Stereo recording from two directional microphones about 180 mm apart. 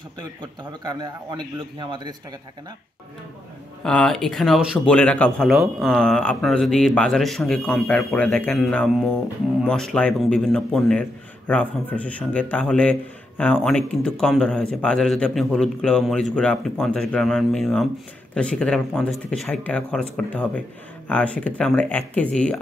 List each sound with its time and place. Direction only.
0.4 s a man's voice: 25° right (ahead or behind)
3.8 s a man's voice: 5° left (ahead or behind)